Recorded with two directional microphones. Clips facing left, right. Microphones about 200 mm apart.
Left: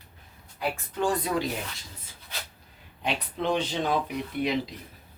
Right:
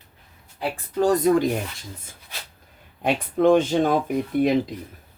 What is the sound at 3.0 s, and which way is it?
Speech, 50° right (ahead or behind).